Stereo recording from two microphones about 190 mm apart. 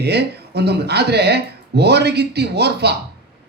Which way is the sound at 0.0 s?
60° right (ahead or behind).